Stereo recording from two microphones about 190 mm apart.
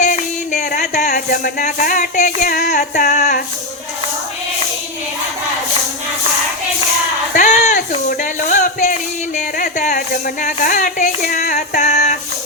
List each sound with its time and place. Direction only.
0.0 s speech: 45° left (ahead or behind)
7.3 s speech: 40° left (ahead or behind)